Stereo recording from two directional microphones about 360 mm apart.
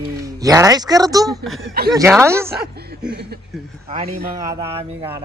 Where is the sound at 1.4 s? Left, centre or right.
Centre.